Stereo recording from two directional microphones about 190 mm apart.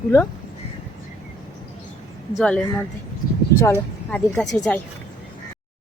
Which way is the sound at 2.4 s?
5° left (ahead or behind).